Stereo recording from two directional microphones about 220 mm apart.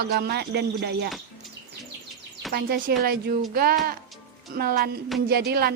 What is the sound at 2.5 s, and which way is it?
Speech, 45° right (ahead or behind).